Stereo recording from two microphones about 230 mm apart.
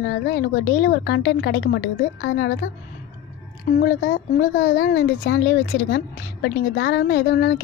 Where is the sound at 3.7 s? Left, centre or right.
Left.